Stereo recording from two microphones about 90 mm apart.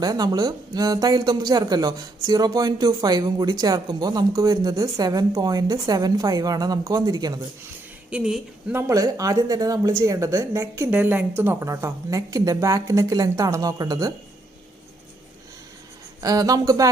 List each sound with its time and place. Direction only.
0.0 s speech: 45° right (ahead or behind)
8.1 s speech: 10° right (ahead or behind)
8.9 s a woman's voice: 40° right (ahead or behind)
10.9 s a woman's voice: 20° right (ahead or behind)
11.7 s a woman's voice: 35° right (ahead or behind)
16.2 s a woman's voice: 40° right (ahead or behind)